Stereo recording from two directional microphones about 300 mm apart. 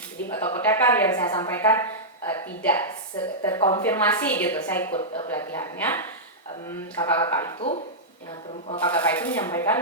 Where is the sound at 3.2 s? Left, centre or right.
Centre.